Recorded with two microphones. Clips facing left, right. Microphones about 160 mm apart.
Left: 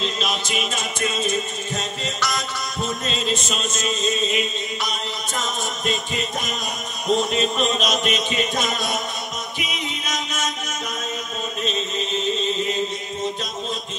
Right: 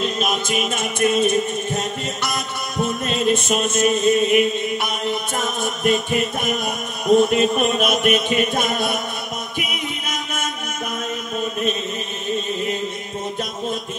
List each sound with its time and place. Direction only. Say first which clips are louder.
0.0 s music: right 4 dB; 50° right (ahead or behind)